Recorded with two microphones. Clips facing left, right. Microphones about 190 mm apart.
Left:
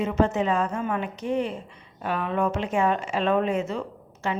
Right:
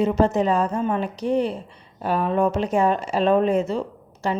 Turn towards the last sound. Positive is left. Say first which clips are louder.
# right 4 dB
turn(degrees=-35)  # may be behind; listen again after turning